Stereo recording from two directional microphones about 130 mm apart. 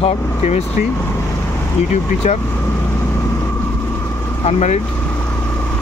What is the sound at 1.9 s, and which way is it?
Speech, 65° left (ahead or behind).